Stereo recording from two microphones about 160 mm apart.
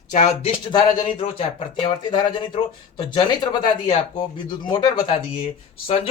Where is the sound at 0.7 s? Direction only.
25° left (ahead or behind).